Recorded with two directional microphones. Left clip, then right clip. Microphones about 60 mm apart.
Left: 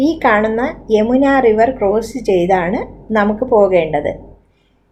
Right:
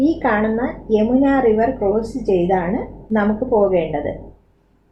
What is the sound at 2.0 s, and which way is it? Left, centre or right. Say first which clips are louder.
A woman's voice: left 3 dB; left.